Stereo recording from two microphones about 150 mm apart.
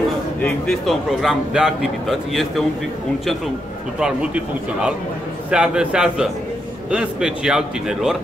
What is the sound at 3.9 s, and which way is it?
A man's voice, 5° right (ahead or behind).